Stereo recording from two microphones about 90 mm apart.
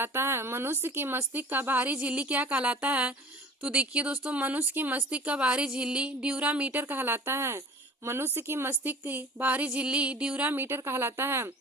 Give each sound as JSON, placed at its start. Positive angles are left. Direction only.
{"t": 0.0, "sound": "speech", "side_deg": -30}